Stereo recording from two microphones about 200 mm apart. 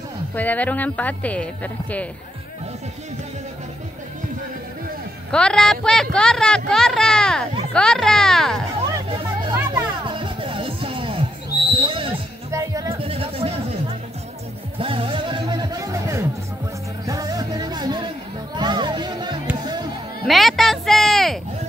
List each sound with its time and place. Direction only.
0.3 s speech: 10° left (ahead or behind)
5.3 s speech: 5° left (ahead or behind)
8.9 s music: 20° right (ahead or behind)
11.8 s a sound: 25° right (ahead or behind)
12.4 s music: 15° right (ahead or behind)
12.9 s bleat: 30° right (ahead or behind)
14.8 s music: 25° right (ahead or behind)
20.2 s a sound: centre (ahead or behind)